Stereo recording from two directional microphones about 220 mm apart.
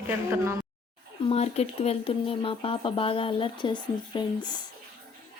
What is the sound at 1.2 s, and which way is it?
A woman's voice, 30° left (ahead or behind).